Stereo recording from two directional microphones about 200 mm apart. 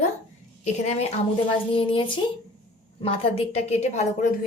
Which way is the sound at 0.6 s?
35° left (ahead or behind).